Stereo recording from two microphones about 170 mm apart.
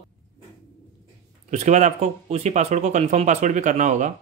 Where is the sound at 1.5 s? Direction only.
45° right (ahead or behind).